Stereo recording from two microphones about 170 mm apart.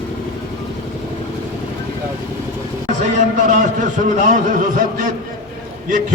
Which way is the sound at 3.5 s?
50° right (ahead or behind).